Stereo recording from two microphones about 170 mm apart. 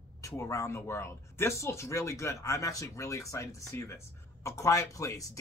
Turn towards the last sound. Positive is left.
turn(degrees=20)  # may be behind; listen again after turning